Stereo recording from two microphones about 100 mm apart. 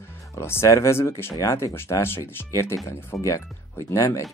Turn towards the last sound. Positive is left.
turn(degrees=30)  # may be behind; listen again after turning